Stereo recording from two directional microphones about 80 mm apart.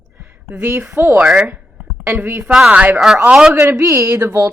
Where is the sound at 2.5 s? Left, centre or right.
Centre.